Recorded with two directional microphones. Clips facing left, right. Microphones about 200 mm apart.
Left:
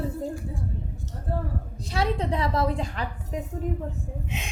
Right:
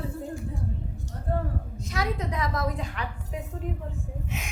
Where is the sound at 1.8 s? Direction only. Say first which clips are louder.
Left 4 dB; 30° left (ahead or behind).